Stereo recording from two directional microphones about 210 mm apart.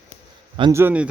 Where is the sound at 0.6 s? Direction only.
15° right (ahead or behind).